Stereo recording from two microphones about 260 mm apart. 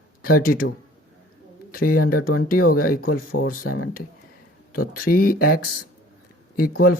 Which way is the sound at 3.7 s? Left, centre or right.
Left.